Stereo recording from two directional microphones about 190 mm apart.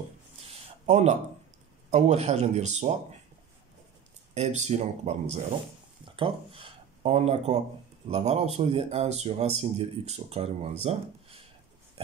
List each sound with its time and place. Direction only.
0.5 s a sound: 35° right (ahead or behind)
1.9 s speech: 35° right (ahead or behind)
4.3 s speech: 35° right (ahead or behind)